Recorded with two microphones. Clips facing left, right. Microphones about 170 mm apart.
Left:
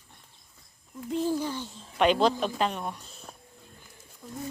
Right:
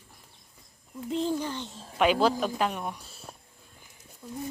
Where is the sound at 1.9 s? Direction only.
5° right (ahead or behind).